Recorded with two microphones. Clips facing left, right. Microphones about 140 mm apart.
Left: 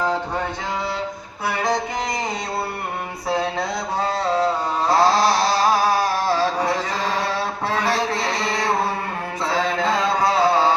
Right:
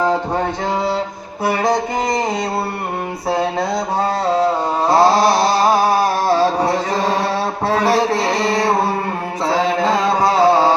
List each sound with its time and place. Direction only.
1.5 s music: 40° right (ahead or behind)
3.2 s mantra: 30° right (ahead or behind)
7.7 s a sound: 30° right (ahead or behind)
9.5 s mantra: 35° right (ahead or behind)
10.2 s carnatic music: 35° right (ahead or behind)